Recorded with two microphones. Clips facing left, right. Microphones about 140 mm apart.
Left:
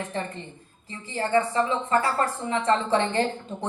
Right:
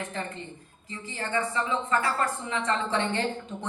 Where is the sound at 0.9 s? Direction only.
35° left (ahead or behind).